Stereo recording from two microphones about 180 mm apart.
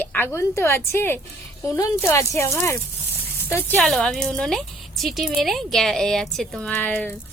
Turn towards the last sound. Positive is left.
turn(degrees=10)  # may be behind; listen again after turning